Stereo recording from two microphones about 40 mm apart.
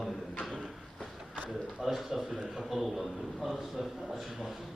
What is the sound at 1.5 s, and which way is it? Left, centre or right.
A man's voice, centre.